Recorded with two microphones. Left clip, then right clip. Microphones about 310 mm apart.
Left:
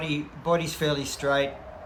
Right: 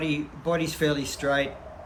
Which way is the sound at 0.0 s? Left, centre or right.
Centre.